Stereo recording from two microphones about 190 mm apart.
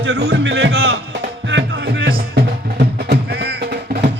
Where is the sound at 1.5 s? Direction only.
70° right (ahead or behind).